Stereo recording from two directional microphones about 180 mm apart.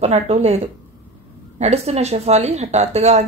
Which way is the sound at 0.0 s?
35° right (ahead or behind).